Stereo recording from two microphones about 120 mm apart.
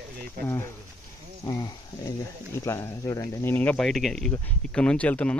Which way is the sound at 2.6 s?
25° left (ahead or behind).